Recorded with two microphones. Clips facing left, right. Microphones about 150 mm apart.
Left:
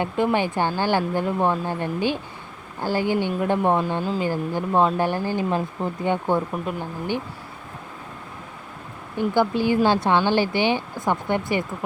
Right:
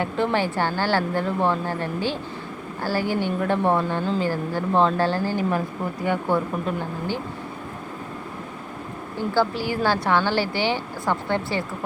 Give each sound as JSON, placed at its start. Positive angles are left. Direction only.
{"t": 0.0, "sound": "speech", "side_deg": 15}
{"t": 9.1, "sound": "speech", "side_deg": 20}